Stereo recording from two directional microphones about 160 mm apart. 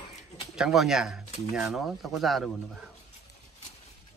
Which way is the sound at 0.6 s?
Centre (ahead or behind).